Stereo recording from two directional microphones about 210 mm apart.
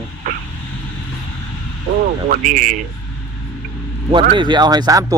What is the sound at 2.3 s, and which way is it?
Speech, 40° right (ahead or behind).